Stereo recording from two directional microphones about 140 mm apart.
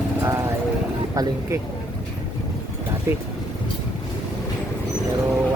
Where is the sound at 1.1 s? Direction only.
25° right (ahead or behind).